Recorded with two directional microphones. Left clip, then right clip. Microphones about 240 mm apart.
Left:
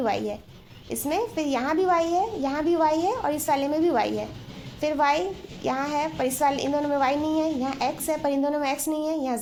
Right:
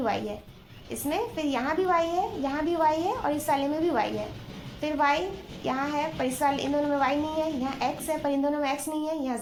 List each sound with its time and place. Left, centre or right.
0.9 s a woman's voice: left